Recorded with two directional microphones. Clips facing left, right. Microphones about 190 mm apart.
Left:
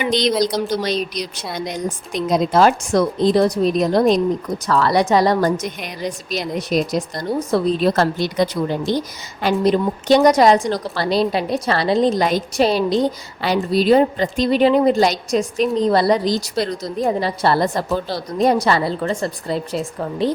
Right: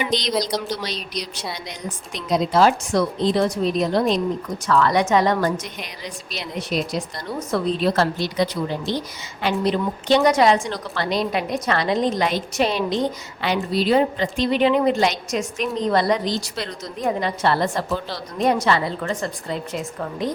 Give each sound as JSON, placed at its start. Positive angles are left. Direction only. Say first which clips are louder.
{"t": 0.0, "sound": "a woman's voice", "louder": "left 5 dB", "side_deg": 60}